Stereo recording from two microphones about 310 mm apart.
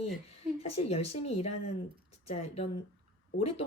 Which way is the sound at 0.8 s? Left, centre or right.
Centre.